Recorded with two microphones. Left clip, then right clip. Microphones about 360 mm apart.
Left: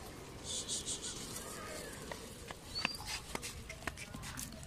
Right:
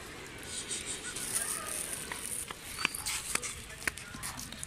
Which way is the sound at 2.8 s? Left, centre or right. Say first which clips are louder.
Right 6 dB; left.